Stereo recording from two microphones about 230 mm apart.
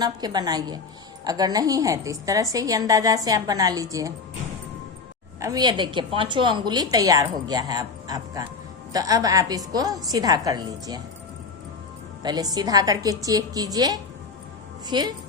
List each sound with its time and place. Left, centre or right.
0.0 s a woman's voice: centre
5.4 s a woman's voice: centre
12.2 s a woman's voice: centre